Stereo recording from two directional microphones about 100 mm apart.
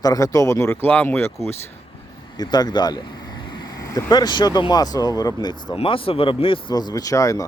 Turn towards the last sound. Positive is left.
turn(degrees=35)  # may be behind; listen again after turning